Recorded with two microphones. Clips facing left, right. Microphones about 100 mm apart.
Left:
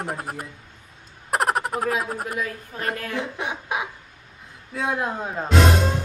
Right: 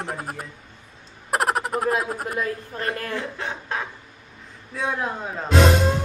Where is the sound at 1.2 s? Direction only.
Centre (ahead or behind).